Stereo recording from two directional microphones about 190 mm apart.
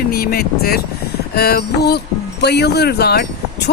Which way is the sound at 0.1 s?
55° left (ahead or behind).